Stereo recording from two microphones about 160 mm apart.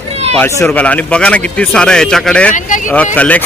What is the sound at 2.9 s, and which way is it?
Speech, 10° left (ahead or behind).